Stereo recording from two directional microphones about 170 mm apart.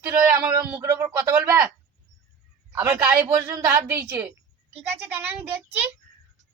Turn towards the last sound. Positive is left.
turn(degrees=-10)  # may be behind; listen again after turning